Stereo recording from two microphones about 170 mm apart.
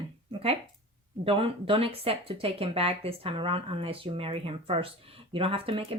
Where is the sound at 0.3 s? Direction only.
35° right (ahead or behind).